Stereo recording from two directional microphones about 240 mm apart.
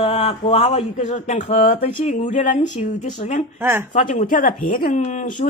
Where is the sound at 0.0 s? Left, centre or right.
Left.